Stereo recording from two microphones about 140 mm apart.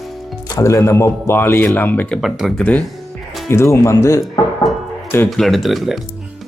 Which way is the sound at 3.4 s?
20° left (ahead or behind).